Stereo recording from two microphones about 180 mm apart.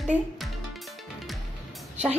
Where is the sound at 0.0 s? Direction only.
Centre (ahead or behind).